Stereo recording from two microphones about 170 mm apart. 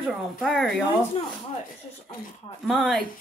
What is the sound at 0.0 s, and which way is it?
Speech, centre (ahead or behind).